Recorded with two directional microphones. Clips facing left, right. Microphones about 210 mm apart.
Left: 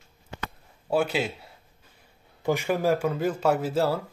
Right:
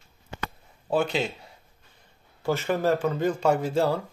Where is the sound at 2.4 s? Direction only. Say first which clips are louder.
Even; 10° left (ahead or behind).